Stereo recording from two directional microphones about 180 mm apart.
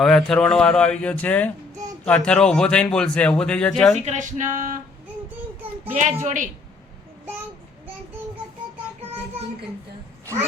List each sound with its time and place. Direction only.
0.0 s a man's voice: 5° left (ahead or behind)
3.9 s speech: 40° right (ahead or behind)
5.9 s a woman's voice: 40° right (ahead or behind)